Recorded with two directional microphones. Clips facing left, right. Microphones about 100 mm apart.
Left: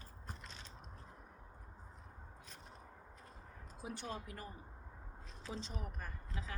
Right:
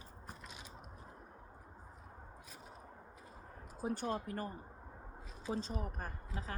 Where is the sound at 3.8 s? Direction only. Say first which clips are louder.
Right 7 dB; 45° right (ahead or behind).